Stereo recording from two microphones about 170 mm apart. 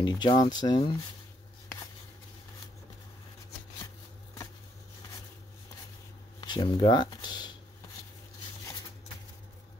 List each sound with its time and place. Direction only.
0.0 s speech: 25° left (ahead or behind)
6.4 s speech: 25° left (ahead or behind)